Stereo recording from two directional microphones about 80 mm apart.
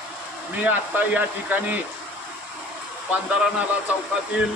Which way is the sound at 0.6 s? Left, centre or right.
Right.